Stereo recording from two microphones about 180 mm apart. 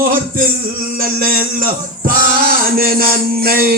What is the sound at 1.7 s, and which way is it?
Music, 55° right (ahead or behind).